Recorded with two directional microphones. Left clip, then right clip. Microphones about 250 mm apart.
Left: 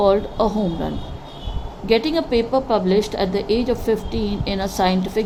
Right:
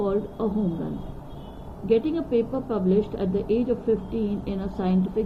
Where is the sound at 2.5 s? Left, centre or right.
Left.